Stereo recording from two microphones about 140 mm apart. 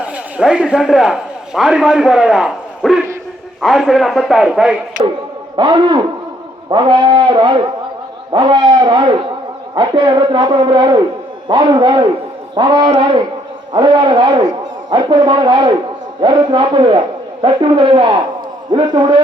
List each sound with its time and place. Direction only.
0.0 s a man's voice: 5° right (ahead or behind)
5.5 s a man's voice: 35° right (ahead or behind)